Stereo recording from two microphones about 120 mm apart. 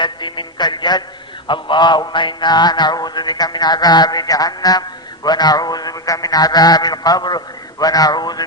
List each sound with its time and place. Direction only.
0.0 s music: 40° left (ahead or behind)